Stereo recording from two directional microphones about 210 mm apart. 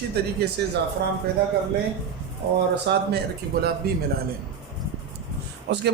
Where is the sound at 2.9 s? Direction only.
55° right (ahead or behind).